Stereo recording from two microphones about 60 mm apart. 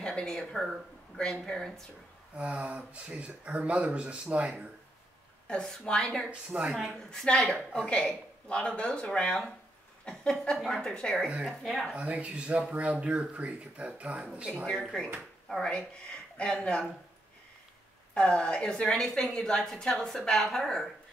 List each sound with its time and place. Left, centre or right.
0.0 s speech: centre
2.3 s speech: right
5.5 s speech: centre
6.5 s speech: right
6.9 s speech: centre
10.6 s speech: centre
11.4 s speech: centre
11.9 s speech: right
14.7 s speech: centre
18.1 s speech: centre